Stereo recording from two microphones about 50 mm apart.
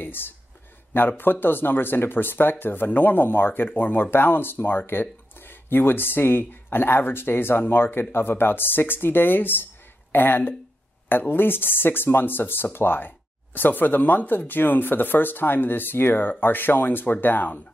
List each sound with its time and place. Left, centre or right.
0.0 s speech: left